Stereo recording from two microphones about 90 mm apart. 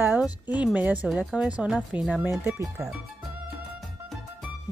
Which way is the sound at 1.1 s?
15° right (ahead or behind).